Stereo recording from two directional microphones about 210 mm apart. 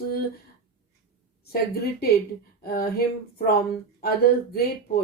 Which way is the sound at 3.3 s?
45° left (ahead or behind).